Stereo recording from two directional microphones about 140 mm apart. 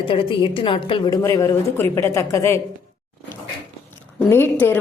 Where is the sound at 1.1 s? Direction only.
25° left (ahead or behind).